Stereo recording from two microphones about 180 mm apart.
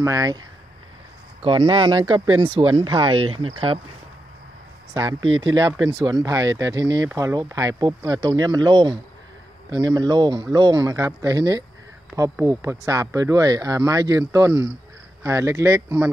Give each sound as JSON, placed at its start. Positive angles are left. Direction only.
{"t": 0.0, "sound": "speech", "side_deg": -20}
{"t": 1.4, "sound": "speech", "side_deg": -30}
{"t": 5.6, "sound": "speech", "side_deg": -20}